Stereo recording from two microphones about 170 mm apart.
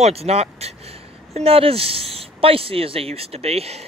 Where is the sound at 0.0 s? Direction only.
35° right (ahead or behind).